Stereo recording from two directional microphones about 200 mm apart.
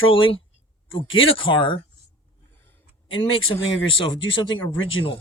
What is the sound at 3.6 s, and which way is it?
Speech, 75° left (ahead or behind).